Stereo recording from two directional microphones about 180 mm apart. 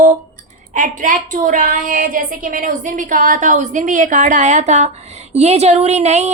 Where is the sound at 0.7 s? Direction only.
45° right (ahead or behind).